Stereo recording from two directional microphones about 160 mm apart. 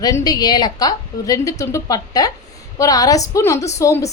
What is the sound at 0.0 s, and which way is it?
A woman's voice, 25° left (ahead or behind).